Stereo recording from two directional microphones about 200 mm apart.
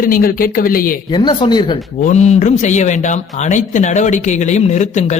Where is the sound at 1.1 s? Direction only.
20° left (ahead or behind).